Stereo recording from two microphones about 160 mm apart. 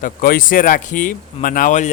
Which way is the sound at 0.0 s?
65° left (ahead or behind).